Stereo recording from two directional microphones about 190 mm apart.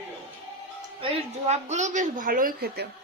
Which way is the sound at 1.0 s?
35° right (ahead or behind).